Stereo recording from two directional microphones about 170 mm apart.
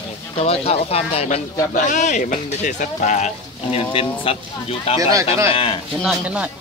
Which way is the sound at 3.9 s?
35° left (ahead or behind).